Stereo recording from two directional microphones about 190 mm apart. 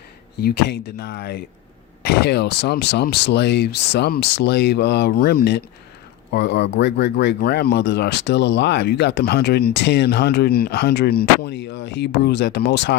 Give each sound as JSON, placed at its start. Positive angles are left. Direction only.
{"t": 0.3, "sound": "speech", "side_deg": 60}